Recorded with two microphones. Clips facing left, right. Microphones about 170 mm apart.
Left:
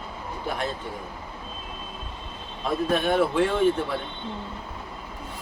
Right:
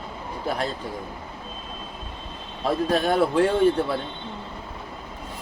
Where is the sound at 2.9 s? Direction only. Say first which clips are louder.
Right 1 dB; 35° right (ahead or behind).